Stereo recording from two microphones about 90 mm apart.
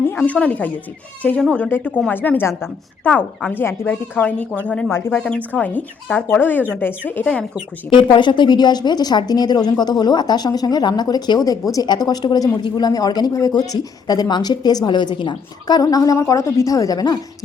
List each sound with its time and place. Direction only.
0.2 s speech: 15° left (ahead or behind)
4.9 s speech: 25° left (ahead or behind)
5.1 s speech: 10° left (ahead or behind)
7.9 s a woman's voice: 60° left (ahead or behind); by 17.2 s 45° left (ahead or behind)